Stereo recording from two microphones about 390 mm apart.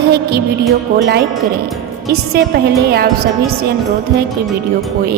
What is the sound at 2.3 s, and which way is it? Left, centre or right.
Speech, right.